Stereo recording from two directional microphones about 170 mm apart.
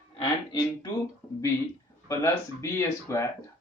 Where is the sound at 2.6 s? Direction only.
15° left (ahead or behind).